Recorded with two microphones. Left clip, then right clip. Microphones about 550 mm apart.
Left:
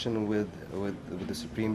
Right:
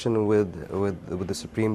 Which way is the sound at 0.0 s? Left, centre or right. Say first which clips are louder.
Right 8 dB; right.